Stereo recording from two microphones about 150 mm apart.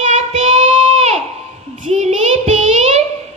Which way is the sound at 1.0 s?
45° right (ahead or behind).